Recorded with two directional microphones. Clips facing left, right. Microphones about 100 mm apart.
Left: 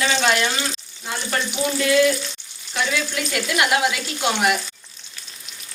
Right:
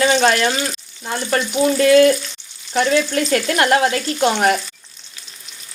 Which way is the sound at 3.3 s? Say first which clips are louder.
Right 3 dB; 50° right (ahead or behind).